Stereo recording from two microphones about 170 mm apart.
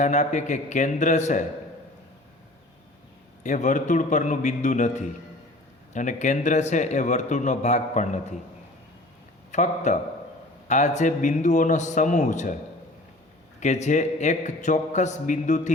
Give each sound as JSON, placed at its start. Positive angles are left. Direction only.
{"t": 0.0, "sound": "speech", "side_deg": 45}
{"t": 3.4, "sound": "speech", "side_deg": 45}
{"t": 9.5, "sound": "speech", "side_deg": 45}
{"t": 13.6, "sound": "speech", "side_deg": 45}